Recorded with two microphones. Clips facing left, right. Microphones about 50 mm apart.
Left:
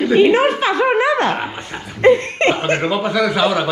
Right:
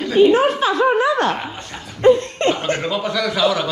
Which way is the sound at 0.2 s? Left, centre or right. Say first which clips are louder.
Right 2 dB; left.